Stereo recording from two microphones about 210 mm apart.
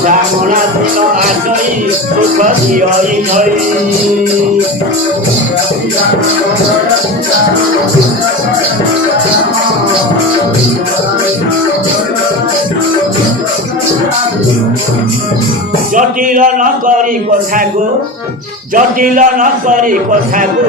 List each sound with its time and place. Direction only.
16.0 s a man's voice: 40° right (ahead or behind)
18.7 s a man's voice: 40° right (ahead or behind)